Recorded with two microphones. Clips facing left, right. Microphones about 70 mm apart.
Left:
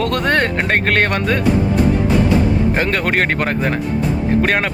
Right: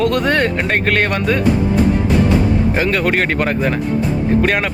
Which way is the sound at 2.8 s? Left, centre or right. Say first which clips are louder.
Right 1 dB; left.